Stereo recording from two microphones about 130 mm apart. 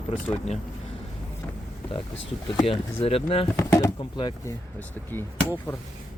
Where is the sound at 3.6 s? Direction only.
25° left (ahead or behind).